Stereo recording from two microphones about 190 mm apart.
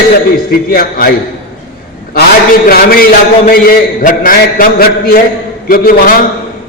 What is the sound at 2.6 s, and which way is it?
A man's voice, 50° left (ahead or behind).